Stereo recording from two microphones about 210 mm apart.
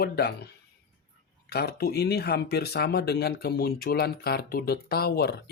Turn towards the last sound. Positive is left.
turn(degrees=50)  # may be behind; listen again after turning